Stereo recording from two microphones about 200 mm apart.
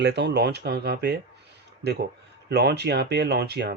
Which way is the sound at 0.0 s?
60° right (ahead or behind).